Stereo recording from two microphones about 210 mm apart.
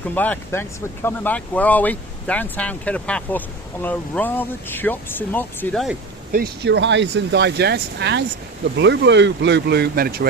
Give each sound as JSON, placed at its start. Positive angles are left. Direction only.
{"t": 0.1, "sound": "speech", "side_deg": 10}
{"t": 6.3, "sound": "speech", "side_deg": -50}